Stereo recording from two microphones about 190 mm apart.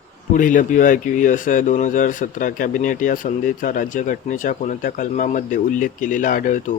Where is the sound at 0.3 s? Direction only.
45° left (ahead or behind).